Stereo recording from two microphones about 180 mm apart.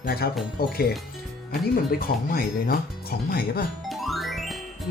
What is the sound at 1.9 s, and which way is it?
Speech, 55° left (ahead or behind).